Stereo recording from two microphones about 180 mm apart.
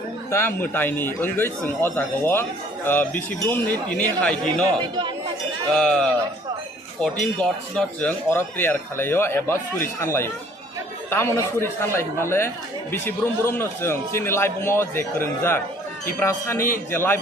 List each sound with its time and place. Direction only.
0.3 s a man's voice: 15° left (ahead or behind)
4.8 s speech: 25° right (ahead or behind)
5.7 s a man's voice: 5° left (ahead or behind)